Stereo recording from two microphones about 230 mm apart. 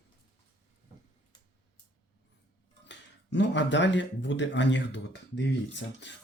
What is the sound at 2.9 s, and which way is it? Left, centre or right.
Speech, left.